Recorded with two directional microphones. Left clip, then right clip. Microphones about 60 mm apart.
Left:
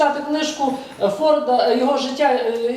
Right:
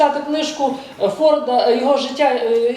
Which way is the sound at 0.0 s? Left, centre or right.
Right.